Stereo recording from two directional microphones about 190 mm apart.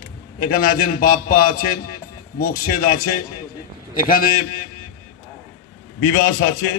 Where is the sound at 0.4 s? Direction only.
50° left (ahead or behind).